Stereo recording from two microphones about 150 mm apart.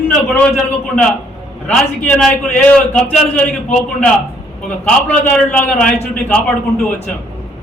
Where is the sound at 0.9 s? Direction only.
5° left (ahead or behind).